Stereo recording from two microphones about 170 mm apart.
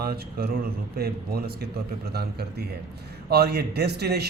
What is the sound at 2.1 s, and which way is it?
A man's voice, 70° right (ahead or behind).